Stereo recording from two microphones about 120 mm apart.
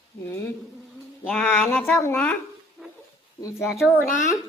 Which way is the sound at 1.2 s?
15° left (ahead or behind).